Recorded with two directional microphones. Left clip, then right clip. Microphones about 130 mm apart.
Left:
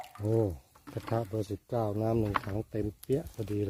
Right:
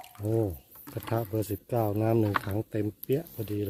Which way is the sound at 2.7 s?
55° right (ahead or behind).